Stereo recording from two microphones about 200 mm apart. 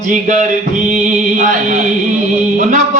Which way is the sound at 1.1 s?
40° right (ahead or behind).